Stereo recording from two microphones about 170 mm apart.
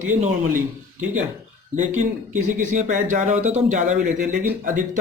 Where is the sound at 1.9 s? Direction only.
50° right (ahead or behind).